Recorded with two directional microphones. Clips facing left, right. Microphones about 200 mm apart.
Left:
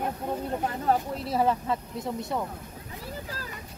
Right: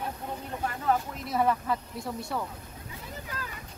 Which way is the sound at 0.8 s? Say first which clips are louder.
Even; 35° left (ahead or behind).